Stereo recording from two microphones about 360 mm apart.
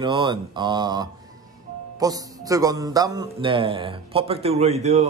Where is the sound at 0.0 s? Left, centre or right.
Centre.